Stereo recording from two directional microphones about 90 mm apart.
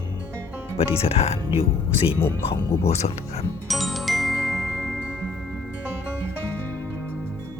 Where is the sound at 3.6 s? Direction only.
Centre (ahead or behind).